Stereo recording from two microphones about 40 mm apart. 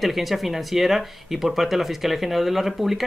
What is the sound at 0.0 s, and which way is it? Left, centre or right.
Speech, centre.